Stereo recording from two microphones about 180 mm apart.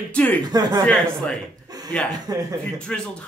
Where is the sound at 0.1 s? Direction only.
10° left (ahead or behind).